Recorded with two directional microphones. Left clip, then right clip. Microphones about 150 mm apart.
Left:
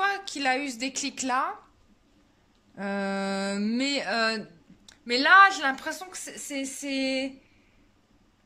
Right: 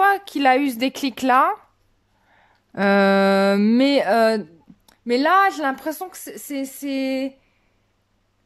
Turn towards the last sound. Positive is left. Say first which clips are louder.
# right 4 dB
turn(degrees=-40)  # may be behind; listen again after turning